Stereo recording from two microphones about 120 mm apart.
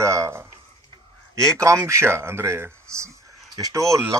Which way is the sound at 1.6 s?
25° right (ahead or behind).